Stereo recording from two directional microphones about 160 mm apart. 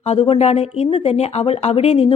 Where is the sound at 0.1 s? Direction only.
40° left (ahead or behind).